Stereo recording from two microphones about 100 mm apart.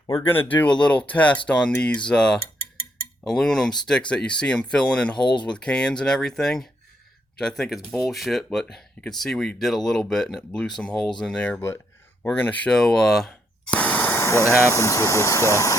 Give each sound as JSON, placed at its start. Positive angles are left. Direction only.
{"t": 0.2, "sound": "speech", "side_deg": 20}
{"t": 5.1, "sound": "speech", "side_deg": 50}
{"t": 5.5, "sound": "speech", "side_deg": 10}
{"t": 13.7, "sound": "speech", "side_deg": 15}